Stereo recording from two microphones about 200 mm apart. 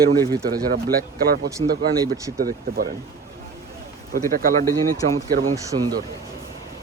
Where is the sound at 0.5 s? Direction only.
50° right (ahead or behind).